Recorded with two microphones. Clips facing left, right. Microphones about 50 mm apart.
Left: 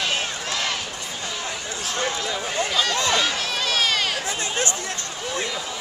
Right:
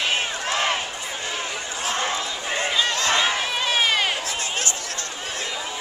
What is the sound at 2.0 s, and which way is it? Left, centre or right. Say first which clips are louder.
Run: left 4 dB; right.